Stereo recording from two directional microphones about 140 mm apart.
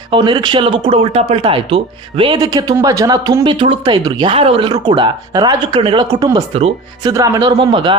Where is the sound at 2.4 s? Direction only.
25° right (ahead or behind).